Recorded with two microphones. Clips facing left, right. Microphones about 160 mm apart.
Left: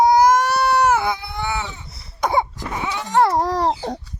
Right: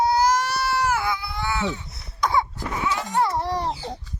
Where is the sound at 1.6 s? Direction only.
50° right (ahead or behind).